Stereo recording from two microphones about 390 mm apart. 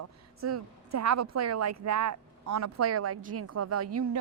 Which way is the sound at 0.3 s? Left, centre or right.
Right.